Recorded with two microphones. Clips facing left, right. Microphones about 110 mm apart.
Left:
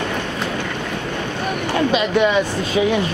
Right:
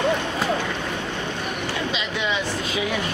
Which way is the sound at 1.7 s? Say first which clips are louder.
Left 14 dB; 50° left (ahead or behind).